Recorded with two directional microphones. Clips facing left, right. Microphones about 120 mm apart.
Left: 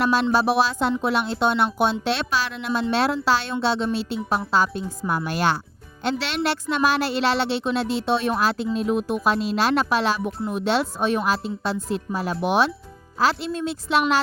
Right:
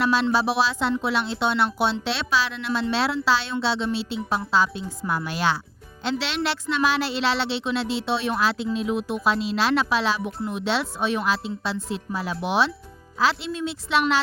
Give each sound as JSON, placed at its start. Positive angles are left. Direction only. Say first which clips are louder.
{"t": 0.0, "sound": "speech", "louder": "left 2 dB", "side_deg": 50}